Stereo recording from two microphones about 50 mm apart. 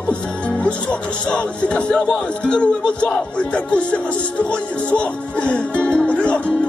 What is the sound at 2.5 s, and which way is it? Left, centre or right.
Music, left.